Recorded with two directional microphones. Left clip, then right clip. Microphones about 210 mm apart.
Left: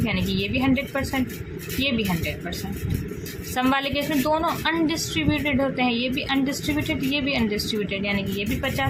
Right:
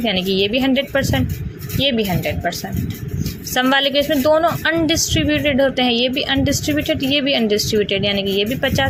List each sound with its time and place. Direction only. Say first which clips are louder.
0.0 s a woman's voice: right 9 dB; 25° right (ahead or behind)
3.5 s a woman's voice: right 8 dB; 25° right (ahead or behind)